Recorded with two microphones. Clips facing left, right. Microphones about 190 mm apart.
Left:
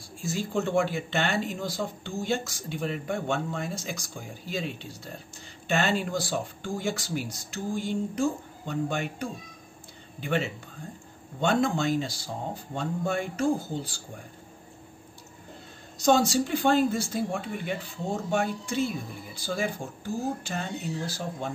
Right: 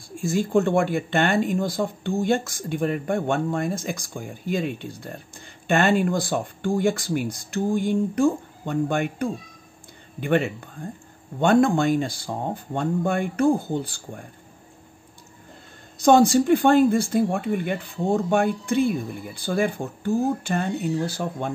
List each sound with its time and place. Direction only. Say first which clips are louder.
0.2 s speech: right 8 dB; 55° right (ahead or behind)
16.0 s speech: right 6 dB; 55° right (ahead or behind)